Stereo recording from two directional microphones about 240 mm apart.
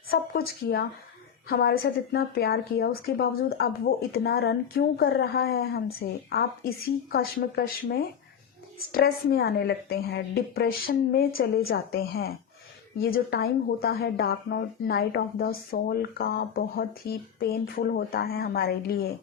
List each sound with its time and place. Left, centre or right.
0.1 s a woman's voice: left